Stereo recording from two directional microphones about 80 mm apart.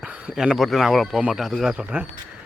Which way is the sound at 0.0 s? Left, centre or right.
Centre.